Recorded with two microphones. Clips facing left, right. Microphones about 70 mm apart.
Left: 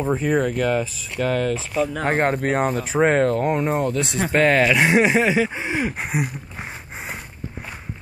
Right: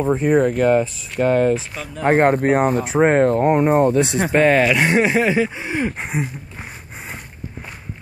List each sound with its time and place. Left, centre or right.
0.0 s speech: centre
2.6 s speech: centre; by 4.2 s right
4.2 s speech: centre
5.5 s speech: centre
5.8 s a sound: centre